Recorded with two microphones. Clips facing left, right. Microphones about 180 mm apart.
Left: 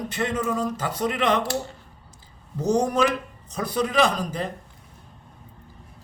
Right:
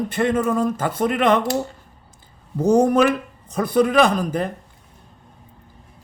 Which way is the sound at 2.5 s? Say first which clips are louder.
Right 6 dB; 55° right (ahead or behind).